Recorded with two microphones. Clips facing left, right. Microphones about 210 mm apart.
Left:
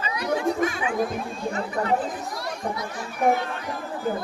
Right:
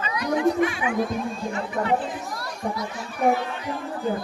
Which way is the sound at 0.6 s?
45° left (ahead or behind).